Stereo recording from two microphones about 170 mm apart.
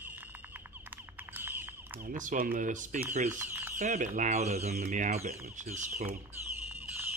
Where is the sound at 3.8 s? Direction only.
45° right (ahead or behind).